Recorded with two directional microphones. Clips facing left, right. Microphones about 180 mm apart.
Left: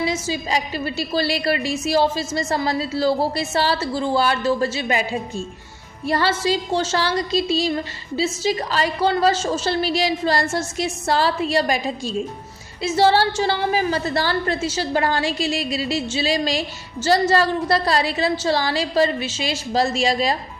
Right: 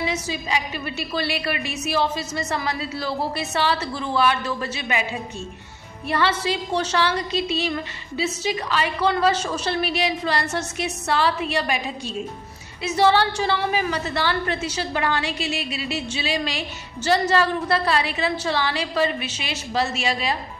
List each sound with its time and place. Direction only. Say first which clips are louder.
0.0 s a woman's voice: left 3 dB; 40° left (ahead or behind)
3.7 s a woman's voice: left 4 dB; 45° left (ahead or behind)
6.0 s a woman's voice: left 3 dB; 40° left (ahead or behind)